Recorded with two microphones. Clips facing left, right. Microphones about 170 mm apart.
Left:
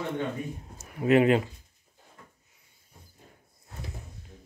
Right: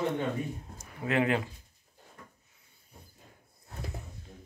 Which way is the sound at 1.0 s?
20° left (ahead or behind).